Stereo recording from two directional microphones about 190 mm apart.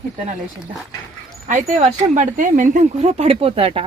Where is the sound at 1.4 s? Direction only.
40° right (ahead or behind).